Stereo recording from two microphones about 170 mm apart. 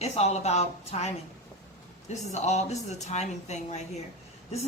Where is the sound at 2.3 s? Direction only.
40° left (ahead or behind).